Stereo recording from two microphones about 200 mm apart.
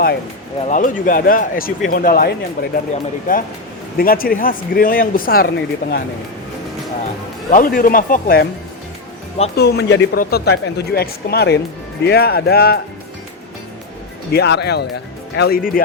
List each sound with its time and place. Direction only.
0.6 s speech: 40° left (ahead or behind)
7.5 s speech: 45° left (ahead or behind)
9.6 s speech: 55° left (ahead or behind)
14.3 s speech: 55° left (ahead or behind)